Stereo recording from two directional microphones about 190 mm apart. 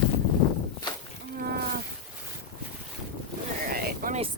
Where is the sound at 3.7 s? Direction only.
50° right (ahead or behind).